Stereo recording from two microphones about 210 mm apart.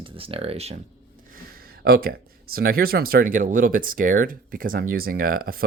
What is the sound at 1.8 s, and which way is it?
Speech, 45° right (ahead or behind).